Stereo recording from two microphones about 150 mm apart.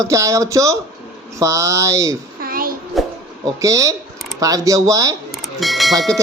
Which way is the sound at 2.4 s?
75° right (ahead or behind).